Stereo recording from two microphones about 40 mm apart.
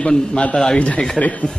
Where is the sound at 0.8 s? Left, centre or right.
Left.